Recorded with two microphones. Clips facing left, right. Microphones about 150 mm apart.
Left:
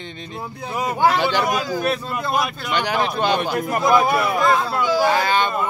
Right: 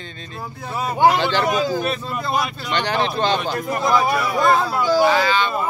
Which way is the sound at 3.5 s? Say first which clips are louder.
Left 2 dB; 20° left (ahead or behind).